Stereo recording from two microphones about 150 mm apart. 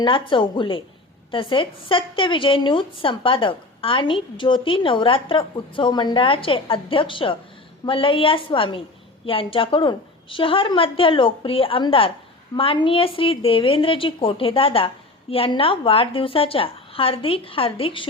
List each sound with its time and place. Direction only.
0.0 s a woman's voice: 35° left (ahead or behind)